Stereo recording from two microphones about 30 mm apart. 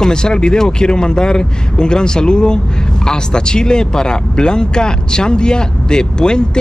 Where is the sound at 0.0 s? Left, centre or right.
Left.